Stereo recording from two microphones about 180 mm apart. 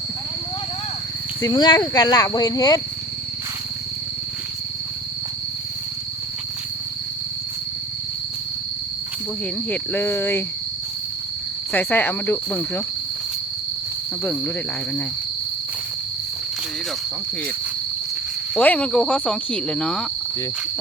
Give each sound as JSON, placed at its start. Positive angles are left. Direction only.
{"t": 1.4, "sound": "speech", "side_deg": 20}
{"t": 9.6, "sound": "speech", "side_deg": 10}
{"t": 11.7, "sound": "speech", "side_deg": 10}
{"t": 18.5, "sound": "speech", "side_deg": 5}